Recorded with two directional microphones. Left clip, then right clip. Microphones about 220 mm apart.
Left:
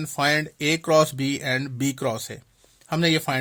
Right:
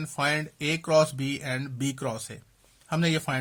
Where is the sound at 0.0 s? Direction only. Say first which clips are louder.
Left 5 dB; 30° left (ahead or behind).